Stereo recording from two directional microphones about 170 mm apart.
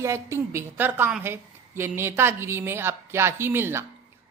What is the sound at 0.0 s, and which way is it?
A woman's voice, 15° right (ahead or behind).